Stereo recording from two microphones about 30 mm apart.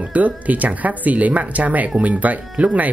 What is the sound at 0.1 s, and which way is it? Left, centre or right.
Speech, right.